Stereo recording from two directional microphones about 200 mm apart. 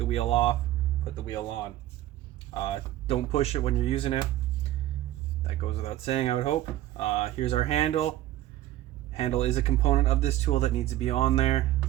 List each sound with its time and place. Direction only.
0.0 s speech: 30° left (ahead or behind)
2.5 s speech: 25° left (ahead or behind)
5.4 s speech: 30° left (ahead or behind)
9.1 s speech: 30° left (ahead or behind)